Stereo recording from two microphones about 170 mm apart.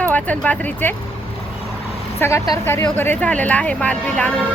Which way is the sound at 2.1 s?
15° left (ahead or behind).